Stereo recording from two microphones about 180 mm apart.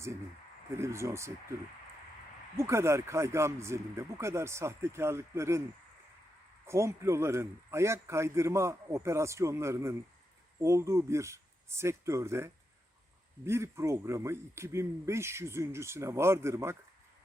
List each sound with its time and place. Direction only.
0.8 s a man's voice: 15° right (ahead or behind)
2.6 s a man's voice: 15° right (ahead or behind)
6.7 s a man's voice: 15° right (ahead or behind)